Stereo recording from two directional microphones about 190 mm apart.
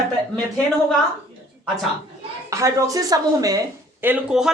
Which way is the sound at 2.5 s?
15° right (ahead or behind).